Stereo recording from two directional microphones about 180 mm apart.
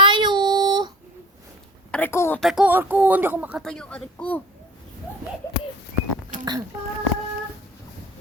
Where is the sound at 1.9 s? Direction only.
10° left (ahead or behind).